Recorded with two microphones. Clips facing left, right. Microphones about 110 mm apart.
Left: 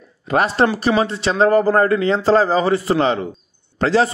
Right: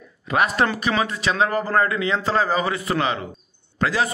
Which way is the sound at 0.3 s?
35° left (ahead or behind).